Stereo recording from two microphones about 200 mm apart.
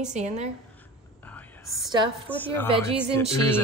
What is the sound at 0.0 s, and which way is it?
Music, 35° right (ahead or behind).